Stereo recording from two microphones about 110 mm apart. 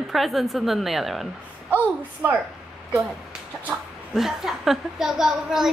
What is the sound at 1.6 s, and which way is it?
Speech, 15° right (ahead or behind).